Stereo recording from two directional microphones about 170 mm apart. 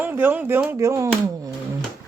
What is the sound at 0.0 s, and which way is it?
Speech, 10° right (ahead or behind).